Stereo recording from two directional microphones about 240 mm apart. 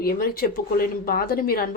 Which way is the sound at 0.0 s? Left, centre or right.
Left.